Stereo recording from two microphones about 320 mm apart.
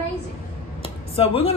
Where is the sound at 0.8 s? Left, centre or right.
Centre.